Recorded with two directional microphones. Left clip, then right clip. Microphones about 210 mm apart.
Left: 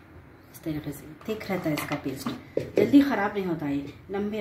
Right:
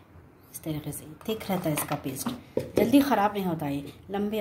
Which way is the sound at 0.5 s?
30° right (ahead or behind).